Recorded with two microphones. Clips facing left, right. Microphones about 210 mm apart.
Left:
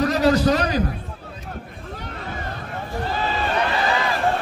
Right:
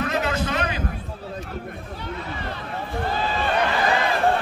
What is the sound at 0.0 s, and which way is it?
Speech, 35° left (ahead or behind).